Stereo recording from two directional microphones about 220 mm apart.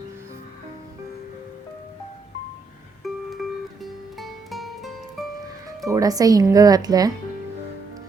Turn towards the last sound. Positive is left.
turn(degrees=-15)  # may be behind; listen again after turning